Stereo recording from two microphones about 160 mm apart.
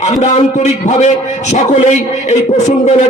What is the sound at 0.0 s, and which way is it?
A man's voice, 45° left (ahead or behind).